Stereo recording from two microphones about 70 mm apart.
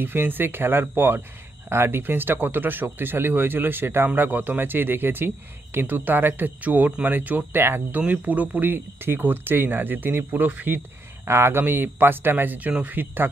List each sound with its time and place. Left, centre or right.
0.0 s a man's voice: right
8.0 s a man's voice: right